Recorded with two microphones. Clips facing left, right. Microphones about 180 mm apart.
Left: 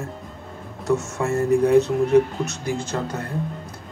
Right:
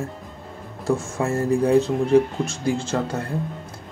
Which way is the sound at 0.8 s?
30° right (ahead or behind).